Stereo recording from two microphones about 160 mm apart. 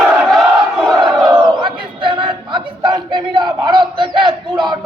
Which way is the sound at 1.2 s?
30° right (ahead or behind).